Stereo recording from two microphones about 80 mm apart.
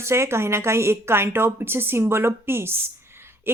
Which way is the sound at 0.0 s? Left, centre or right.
Right.